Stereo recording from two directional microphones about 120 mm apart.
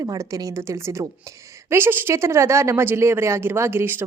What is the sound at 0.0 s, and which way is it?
Speech, 25° right (ahead or behind).